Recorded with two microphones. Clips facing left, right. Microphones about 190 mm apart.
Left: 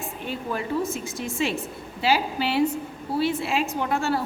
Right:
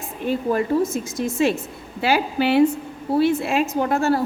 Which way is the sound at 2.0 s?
55° right (ahead or behind).